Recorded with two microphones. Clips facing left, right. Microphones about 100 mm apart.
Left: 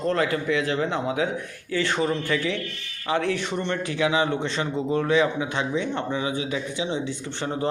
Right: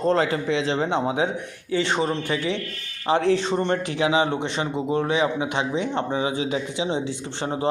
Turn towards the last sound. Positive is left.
turn(degrees=-20)  # may be behind; listen again after turning